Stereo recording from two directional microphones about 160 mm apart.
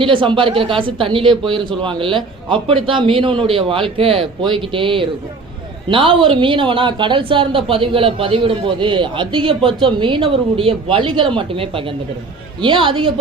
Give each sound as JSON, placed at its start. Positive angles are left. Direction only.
{"t": 0.0, "sound": "speech", "side_deg": -30}